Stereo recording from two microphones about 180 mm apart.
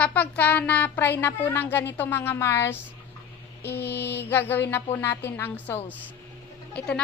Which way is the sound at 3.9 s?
70° left (ahead or behind).